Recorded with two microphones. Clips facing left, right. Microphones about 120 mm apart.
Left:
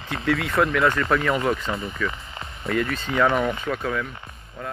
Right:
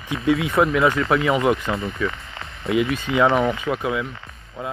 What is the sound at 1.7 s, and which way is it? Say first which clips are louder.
Speech: right 3 dB; centre (ahead or behind).